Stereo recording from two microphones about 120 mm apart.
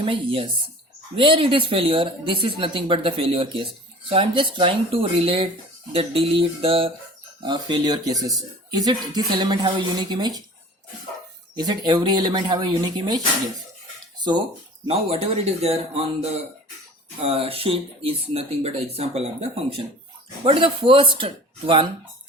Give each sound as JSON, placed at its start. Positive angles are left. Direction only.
{"t": 0.0, "sound": "speech", "side_deg": -45}
{"t": 7.4, "sound": "speech", "side_deg": -35}
{"t": 11.5, "sound": "speech", "side_deg": -35}
{"t": 14.8, "sound": "speech", "side_deg": -60}
{"t": 17.2, "sound": "speech", "side_deg": -55}